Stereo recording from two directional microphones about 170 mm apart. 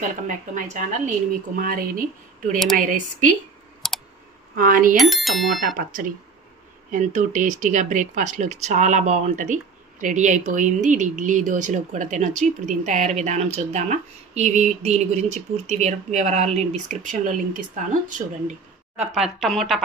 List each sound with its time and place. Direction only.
0.0 s speech: 50° right (ahead or behind)
3.8 s clicking: centre (ahead or behind)
4.6 s speech: 55° right (ahead or behind)
4.9 s speech: centre (ahead or behind)
5.8 s speech: 55° right (ahead or behind)
19.1 s speech: centre (ahead or behind)